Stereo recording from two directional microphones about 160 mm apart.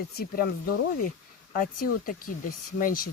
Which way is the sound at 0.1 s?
75° left (ahead or behind).